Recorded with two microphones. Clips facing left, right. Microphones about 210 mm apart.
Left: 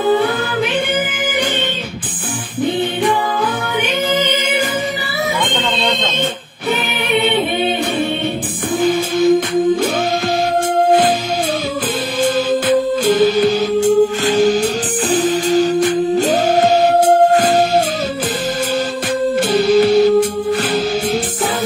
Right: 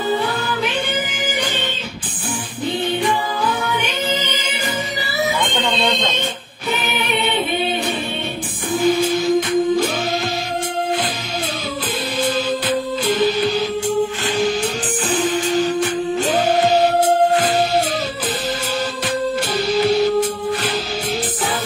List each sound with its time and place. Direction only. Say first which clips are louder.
4.1 s music: left 6 dB; 55° left (ahead or behind)
7.1 s music: left 7 dB; 55° left (ahead or behind)
8.8 s music: left 3 dB; 55° left (ahead or behind)
19.5 s music: left 7 dB; 50° left (ahead or behind)